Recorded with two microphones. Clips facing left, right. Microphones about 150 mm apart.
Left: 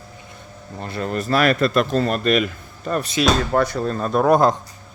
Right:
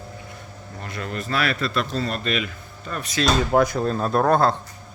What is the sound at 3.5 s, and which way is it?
Speech, 10° right (ahead or behind).